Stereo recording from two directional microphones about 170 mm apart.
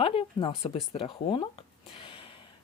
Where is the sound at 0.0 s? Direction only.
30° left (ahead or behind).